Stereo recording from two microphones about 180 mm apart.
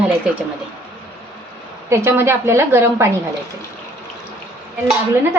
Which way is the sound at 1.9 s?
15° right (ahead or behind).